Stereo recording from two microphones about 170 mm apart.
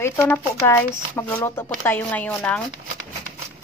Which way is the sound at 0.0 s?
15° left (ahead or behind).